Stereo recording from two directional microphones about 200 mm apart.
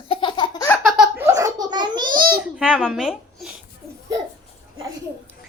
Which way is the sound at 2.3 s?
5° right (ahead or behind).